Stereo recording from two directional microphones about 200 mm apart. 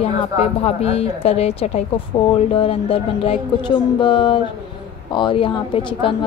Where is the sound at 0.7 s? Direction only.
30° left (ahead or behind).